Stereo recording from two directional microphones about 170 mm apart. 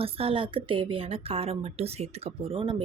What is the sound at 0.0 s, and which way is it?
A woman's voice, 35° right (ahead or behind).